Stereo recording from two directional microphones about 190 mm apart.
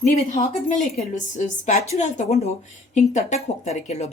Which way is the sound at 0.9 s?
40° left (ahead or behind).